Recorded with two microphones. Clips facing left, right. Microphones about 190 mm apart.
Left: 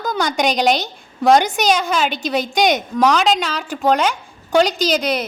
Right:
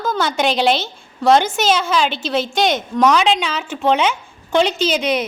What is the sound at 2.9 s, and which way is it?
Speech, centre (ahead or behind).